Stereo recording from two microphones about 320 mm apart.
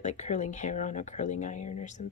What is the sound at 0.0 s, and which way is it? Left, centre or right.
Speech, left.